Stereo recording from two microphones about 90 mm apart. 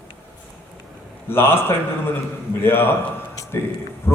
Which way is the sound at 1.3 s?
25° left (ahead or behind).